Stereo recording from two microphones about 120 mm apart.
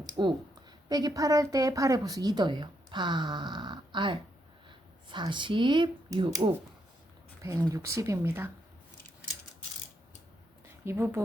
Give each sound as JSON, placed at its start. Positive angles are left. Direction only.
{"t": 0.2, "sound": "a woman's voice", "side_deg": -35}
{"t": 7.4, "sound": "speech", "side_deg": -25}
{"t": 10.8, "sound": "speech", "side_deg": -20}